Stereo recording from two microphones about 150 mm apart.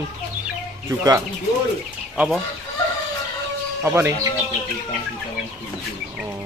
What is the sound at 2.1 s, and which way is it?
Chicken, 5° right (ahead or behind).